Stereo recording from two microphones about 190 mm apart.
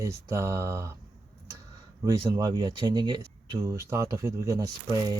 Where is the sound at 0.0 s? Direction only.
15° right (ahead or behind).